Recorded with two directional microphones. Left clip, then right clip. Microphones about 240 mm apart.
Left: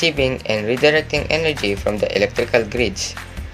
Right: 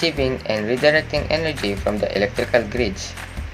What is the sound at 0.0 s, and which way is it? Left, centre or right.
Speech, left.